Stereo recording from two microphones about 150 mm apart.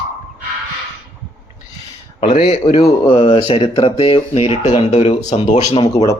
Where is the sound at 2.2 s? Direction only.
35° left (ahead or behind).